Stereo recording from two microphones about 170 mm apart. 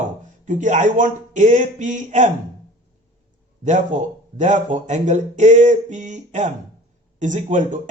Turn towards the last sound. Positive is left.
turn(degrees=-50)  # may be behind; listen again after turning